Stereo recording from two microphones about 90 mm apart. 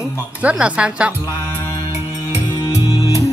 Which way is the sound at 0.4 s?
15° right (ahead or behind).